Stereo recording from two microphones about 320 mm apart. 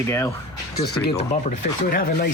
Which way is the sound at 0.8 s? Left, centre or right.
Left.